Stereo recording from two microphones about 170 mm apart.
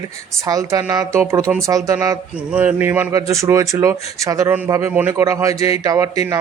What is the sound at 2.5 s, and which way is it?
A man's voice, 10° right (ahead or behind).